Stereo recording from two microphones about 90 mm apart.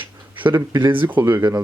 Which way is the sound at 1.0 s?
25° right (ahead or behind).